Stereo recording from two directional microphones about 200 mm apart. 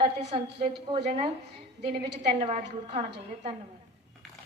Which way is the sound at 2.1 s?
35° right (ahead or behind).